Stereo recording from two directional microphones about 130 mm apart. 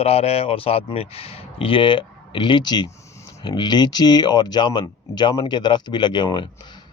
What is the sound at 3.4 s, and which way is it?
Speech, 35° left (ahead or behind).